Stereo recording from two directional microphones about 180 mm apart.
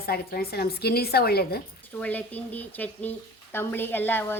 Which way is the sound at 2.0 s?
10° left (ahead or behind).